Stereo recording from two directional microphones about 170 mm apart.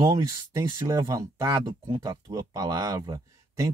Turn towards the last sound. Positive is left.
turn(degrees=-20)  # may be behind; listen again after turning